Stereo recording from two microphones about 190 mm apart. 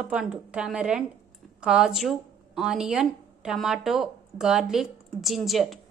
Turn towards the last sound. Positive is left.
turn(degrees=0)  # may be behind; listen again after turning